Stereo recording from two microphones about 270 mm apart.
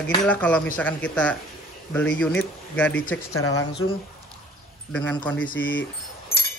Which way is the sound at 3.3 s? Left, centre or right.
Left.